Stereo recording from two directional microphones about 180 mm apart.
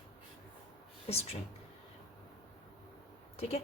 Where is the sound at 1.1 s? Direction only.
35° left (ahead or behind).